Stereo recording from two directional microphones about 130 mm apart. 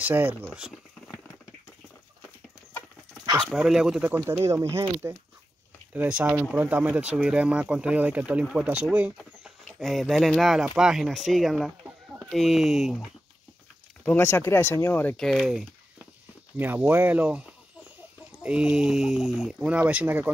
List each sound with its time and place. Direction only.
0.0 s speech: 15° right (ahead or behind)
3.4 s speech: 5° right (ahead or behind)
14.0 s speech: 15° left (ahead or behind)
15.1 s speech: centre (ahead or behind)
16.5 s speech: 15° right (ahead or behind)